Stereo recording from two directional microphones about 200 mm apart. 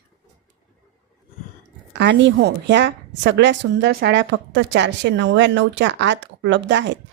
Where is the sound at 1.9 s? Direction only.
60° right (ahead or behind).